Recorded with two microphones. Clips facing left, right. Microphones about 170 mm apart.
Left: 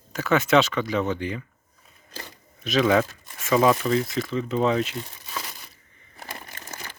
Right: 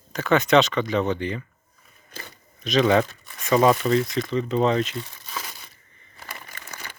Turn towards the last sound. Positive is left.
turn(degrees=35)  # may be behind; listen again after turning